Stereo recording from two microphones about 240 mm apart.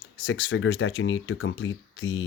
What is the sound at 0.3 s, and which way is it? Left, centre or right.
Speech, left.